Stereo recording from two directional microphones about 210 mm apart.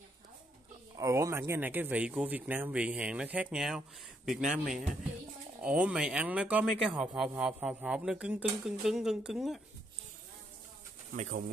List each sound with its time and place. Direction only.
0.9 s a man's voice: 15° right (ahead or behind)
11.1 s speech: 35° right (ahead or behind)